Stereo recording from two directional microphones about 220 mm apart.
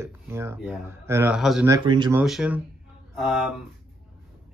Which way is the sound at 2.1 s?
5° right (ahead or behind).